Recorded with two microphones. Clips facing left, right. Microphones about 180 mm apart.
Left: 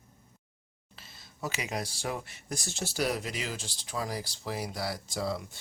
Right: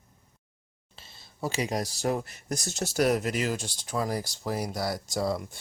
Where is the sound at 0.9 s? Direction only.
30° right (ahead or behind).